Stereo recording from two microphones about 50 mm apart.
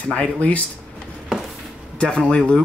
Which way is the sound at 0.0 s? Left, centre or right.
Left.